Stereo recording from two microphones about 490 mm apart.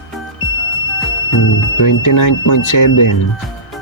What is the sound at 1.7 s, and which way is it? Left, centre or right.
Speech, left.